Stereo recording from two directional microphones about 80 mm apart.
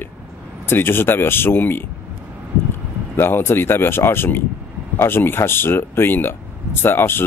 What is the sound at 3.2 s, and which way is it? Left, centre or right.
Speech, left.